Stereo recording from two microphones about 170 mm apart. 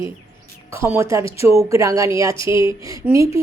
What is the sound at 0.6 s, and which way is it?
A woman's voice, 15° right (ahead or behind).